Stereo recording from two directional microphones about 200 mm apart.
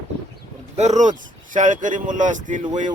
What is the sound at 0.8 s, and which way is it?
Speech, 35° right (ahead or behind).